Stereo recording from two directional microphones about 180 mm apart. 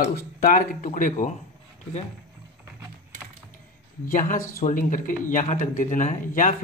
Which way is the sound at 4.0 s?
50° left (ahead or behind).